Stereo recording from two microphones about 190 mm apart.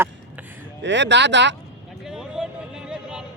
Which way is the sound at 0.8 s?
70° right (ahead or behind).